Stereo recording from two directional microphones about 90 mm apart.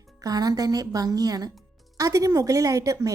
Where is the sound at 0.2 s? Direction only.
45° right (ahead or behind).